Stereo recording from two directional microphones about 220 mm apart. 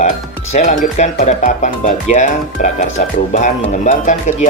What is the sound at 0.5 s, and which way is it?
Speech, 30° left (ahead or behind).